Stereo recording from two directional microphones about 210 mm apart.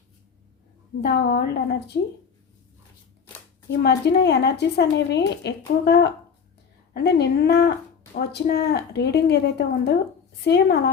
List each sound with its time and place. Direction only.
1.0 s speech: 50° left (ahead or behind)
3.7 s speech: 50° left (ahead or behind)